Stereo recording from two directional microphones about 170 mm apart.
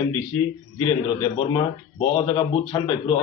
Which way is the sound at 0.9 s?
20° left (ahead or behind).